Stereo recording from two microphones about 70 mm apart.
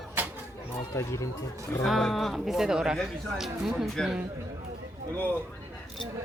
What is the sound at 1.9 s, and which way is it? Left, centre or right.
Speech, centre.